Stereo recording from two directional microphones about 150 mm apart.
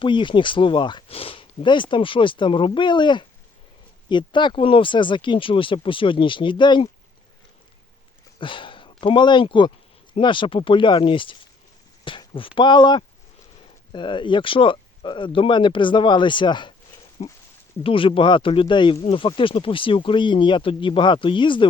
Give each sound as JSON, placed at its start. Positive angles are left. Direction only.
{"t": 0.0, "sound": "speech", "side_deg": 30}
{"t": 8.4, "sound": "speech", "side_deg": 35}
{"t": 12.0, "sound": "a sound", "side_deg": 35}
{"t": 12.5, "sound": "speech", "side_deg": 30}
{"t": 17.2, "sound": "speech", "side_deg": 40}